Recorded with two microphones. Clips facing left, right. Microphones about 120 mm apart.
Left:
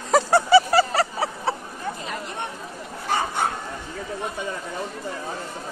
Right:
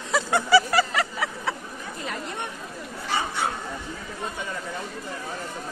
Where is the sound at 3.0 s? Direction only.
45° left (ahead or behind).